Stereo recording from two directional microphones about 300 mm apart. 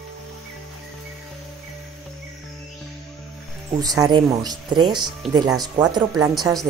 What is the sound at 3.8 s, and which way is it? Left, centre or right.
Speech, centre.